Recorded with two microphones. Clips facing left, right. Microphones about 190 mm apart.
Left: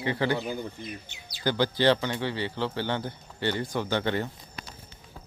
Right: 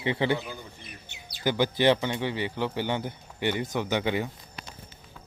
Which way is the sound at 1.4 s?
15° right (ahead or behind).